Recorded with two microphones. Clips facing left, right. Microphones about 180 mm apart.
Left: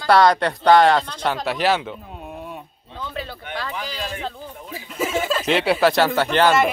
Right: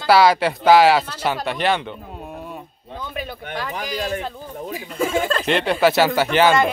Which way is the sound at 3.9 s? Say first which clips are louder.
Right 4 dB; 15° right (ahead or behind).